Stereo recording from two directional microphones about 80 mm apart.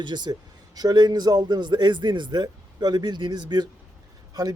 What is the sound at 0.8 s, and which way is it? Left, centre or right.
Speech, right.